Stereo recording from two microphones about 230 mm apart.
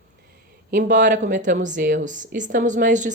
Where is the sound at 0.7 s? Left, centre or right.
Right.